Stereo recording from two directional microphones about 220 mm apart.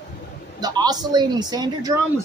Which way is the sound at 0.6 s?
20° right (ahead or behind).